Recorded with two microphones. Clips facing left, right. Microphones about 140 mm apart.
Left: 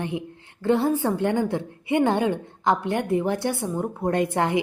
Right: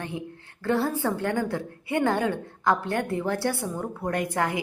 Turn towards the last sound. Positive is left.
turn(degrees=25)  # may be behind; listen again after turning